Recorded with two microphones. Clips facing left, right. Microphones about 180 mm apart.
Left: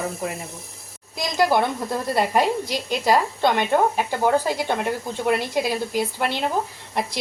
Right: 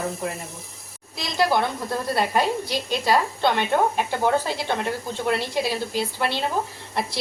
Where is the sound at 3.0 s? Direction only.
15° left (ahead or behind).